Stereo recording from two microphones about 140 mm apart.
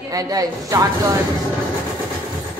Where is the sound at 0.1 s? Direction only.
25° right (ahead or behind).